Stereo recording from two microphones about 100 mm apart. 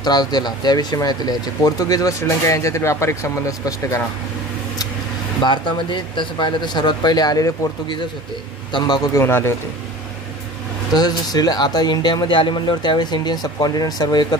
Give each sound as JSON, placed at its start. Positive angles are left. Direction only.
{"t": 0.0, "sound": "speech", "side_deg": 40}
{"t": 5.4, "sound": "speech", "side_deg": 50}
{"t": 8.7, "sound": "speech", "side_deg": 45}
{"t": 9.1, "sound": "speech", "side_deg": 25}
{"t": 10.9, "sound": "speech", "side_deg": 40}